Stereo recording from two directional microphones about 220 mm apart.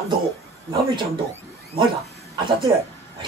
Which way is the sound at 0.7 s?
20° right (ahead or behind).